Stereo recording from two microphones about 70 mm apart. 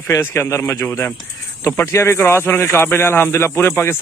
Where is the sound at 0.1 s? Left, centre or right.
Left.